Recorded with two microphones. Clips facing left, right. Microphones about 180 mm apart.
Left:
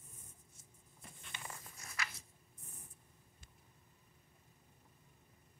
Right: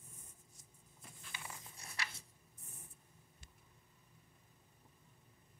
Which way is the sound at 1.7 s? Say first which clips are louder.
Left 2 dB; 30° right (ahead or behind).